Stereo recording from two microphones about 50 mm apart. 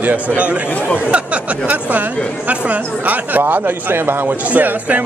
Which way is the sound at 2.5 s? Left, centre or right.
Right.